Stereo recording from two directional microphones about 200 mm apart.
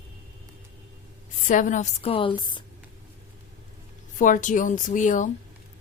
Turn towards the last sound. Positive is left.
turn(degrees=40)  # may be behind; listen again after turning